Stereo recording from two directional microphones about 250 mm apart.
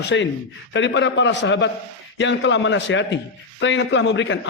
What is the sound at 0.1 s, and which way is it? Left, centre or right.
A man's voice, left.